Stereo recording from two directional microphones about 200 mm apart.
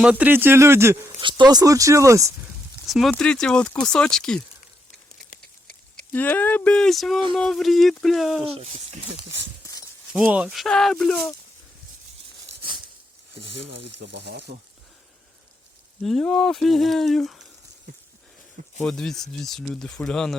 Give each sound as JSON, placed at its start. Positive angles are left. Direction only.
{"t": 0.0, "sound": "speech", "side_deg": -5}
{"t": 1.2, "sound": "speech", "side_deg": -25}
{"t": 2.8, "sound": "speech", "side_deg": 0}
{"t": 6.1, "sound": "speech", "side_deg": 10}
{"t": 8.5, "sound": "speech", "side_deg": -30}
{"t": 10.1, "sound": "speech", "side_deg": -5}
{"t": 13.8, "sound": "speech", "side_deg": -60}
{"t": 16.0, "sound": "speech", "side_deg": 0}
{"t": 18.9, "sound": "speech", "side_deg": 0}